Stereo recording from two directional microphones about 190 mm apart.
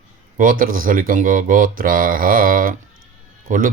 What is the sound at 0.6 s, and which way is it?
Speech, 50° right (ahead or behind).